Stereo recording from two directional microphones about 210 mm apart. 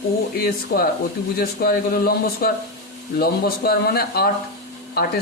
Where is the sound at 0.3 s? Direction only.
45° left (ahead or behind).